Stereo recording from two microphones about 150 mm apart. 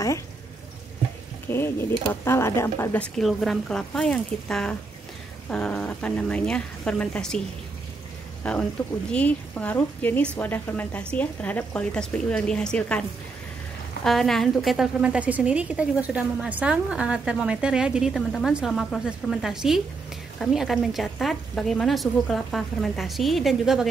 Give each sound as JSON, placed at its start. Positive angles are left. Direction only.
{"t": 1.5, "sound": "a woman's voice", "side_deg": 15}
{"t": 3.0, "sound": "a woman's voice", "side_deg": 0}
{"t": 8.4, "sound": "a woman's voice", "side_deg": 5}
{"t": 14.0, "sound": "a woman's voice", "side_deg": 0}